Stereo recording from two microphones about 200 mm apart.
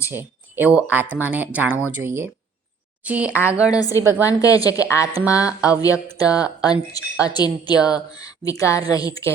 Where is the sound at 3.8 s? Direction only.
20° left (ahead or behind).